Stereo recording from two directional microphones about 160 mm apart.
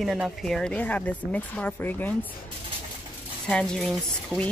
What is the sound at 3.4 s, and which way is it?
Speech, 5° left (ahead or behind).